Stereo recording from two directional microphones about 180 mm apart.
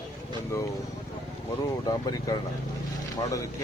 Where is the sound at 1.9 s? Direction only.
20° left (ahead or behind).